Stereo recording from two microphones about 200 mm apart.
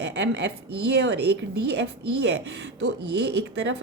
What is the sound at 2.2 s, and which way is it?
A woman's voice, 60° right (ahead or behind).